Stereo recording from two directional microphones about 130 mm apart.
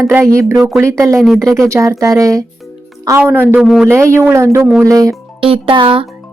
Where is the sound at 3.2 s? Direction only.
15° right (ahead or behind).